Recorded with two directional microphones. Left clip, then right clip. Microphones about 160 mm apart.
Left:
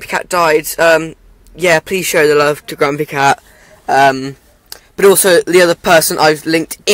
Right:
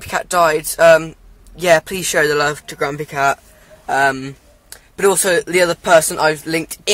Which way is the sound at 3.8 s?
30° left (ahead or behind).